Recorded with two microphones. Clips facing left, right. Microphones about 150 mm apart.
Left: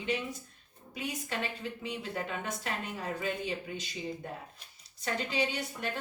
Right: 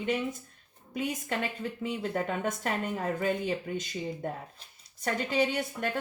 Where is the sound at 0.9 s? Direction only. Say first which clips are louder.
Right 5 dB; 50° right (ahead or behind).